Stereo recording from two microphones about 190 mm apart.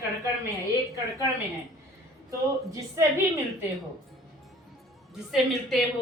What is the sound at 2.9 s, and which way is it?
Speech, 15° right (ahead or behind).